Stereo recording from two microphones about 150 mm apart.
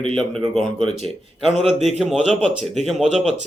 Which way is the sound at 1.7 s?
45° right (ahead or behind).